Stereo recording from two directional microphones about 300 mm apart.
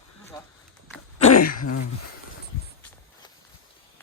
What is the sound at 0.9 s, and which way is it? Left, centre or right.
Throat clearing, left.